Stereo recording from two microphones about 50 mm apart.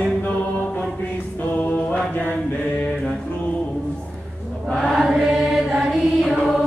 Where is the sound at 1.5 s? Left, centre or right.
Left.